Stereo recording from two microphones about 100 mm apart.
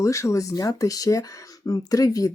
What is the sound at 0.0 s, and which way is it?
Speech, 30° left (ahead or behind).